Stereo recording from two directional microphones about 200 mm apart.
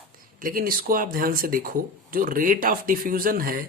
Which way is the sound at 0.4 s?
45° right (ahead or behind).